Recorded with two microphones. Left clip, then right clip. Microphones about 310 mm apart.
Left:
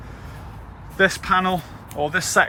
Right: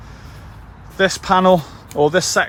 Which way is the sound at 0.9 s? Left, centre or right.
Centre.